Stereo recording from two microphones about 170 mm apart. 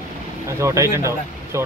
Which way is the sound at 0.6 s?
15° right (ahead or behind).